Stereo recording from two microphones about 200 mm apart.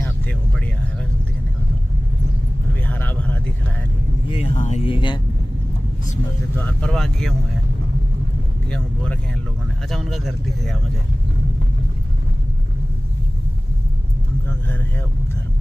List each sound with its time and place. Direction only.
2.9 s a sound: 10° left (ahead or behind)
4.3 s speech: 35° left (ahead or behind)
6.6 s speech: 5° left (ahead or behind)
8.6 s speech: 5° left (ahead or behind)